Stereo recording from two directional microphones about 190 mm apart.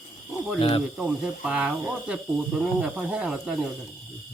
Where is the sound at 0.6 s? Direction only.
30° left (ahead or behind).